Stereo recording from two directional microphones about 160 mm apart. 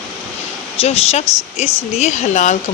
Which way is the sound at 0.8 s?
40° left (ahead or behind).